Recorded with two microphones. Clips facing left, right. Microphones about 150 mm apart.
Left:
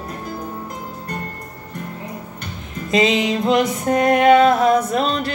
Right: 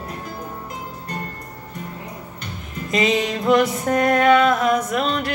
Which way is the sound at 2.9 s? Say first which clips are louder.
Left 3 dB; 25° left (ahead or behind).